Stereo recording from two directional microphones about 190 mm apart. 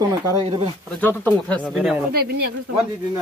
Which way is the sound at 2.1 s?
55° right (ahead or behind).